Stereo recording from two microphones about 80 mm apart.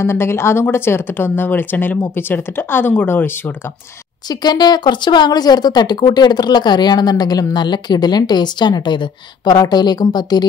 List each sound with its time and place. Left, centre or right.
0.0 s speech: left
4.3 s speech: left
7.5 s speech: left